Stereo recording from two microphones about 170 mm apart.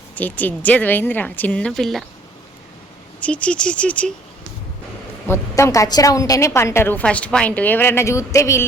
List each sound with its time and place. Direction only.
0.2 s a woman's voice: 10° left (ahead or behind)
3.2 s a woman's voice: 10° left (ahead or behind)
5.3 s a woman's voice: 15° left (ahead or behind)